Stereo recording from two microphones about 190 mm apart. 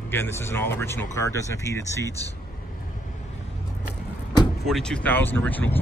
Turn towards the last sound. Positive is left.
turn(degrees=10)  # may be behind; listen again after turning